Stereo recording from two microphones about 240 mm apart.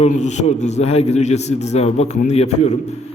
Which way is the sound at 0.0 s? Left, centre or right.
Left.